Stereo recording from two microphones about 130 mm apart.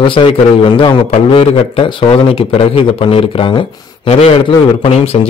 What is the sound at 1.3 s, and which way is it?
Speech, 45° left (ahead or behind).